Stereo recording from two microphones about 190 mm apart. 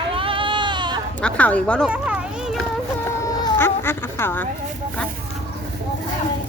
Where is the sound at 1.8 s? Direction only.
5° right (ahead or behind).